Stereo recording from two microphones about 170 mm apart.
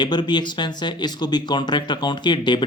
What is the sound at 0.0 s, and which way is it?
Speech, 25° left (ahead or behind).